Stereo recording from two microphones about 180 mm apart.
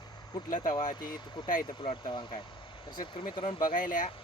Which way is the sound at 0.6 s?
25° left (ahead or behind).